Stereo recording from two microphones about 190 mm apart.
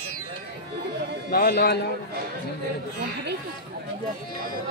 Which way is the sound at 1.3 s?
55° left (ahead or behind).